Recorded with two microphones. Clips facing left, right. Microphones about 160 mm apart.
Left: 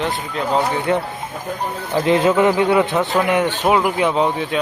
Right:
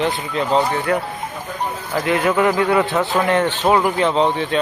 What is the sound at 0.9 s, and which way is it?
Speech, 20° left (ahead or behind).